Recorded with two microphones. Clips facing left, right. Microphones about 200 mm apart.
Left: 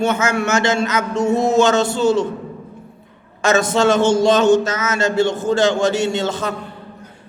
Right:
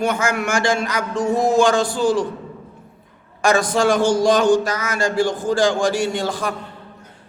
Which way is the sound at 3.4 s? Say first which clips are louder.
Left 2 dB; 25° left (ahead or behind).